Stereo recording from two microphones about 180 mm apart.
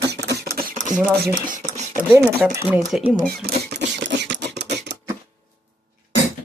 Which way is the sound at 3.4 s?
65° right (ahead or behind).